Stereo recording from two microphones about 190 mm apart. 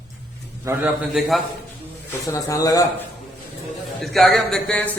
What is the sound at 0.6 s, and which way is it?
Speech, 10° right (ahead or behind).